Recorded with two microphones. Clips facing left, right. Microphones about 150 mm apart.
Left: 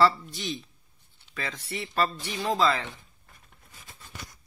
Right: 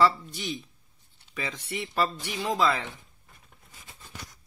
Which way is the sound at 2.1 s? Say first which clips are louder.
Left 1 dB; centre (ahead or behind).